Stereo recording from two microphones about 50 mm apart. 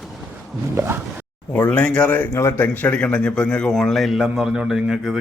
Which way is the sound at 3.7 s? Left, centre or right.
Centre.